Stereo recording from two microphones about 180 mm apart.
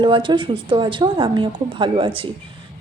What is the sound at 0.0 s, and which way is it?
A woman's voice, 25° right (ahead or behind).